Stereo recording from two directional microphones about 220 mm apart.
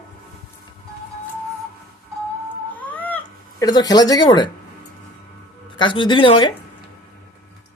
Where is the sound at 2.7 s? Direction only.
5° left (ahead or behind).